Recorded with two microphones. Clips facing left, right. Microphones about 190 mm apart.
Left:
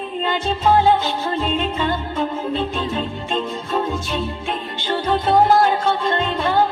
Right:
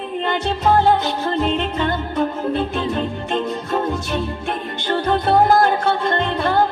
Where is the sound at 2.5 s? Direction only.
55° right (ahead or behind).